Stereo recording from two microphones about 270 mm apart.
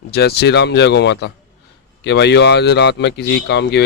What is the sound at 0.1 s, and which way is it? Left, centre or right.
A man's voice, left.